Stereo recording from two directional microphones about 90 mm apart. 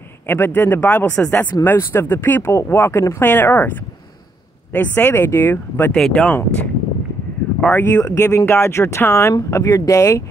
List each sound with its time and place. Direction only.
0.3 s speech: 25° left (ahead or behind)
4.7 s speech: 25° left (ahead or behind)
5.9 s speech: 5° left (ahead or behind)
6.2 s speech: 15° left (ahead or behind); by 10.2 s 35° left (ahead or behind)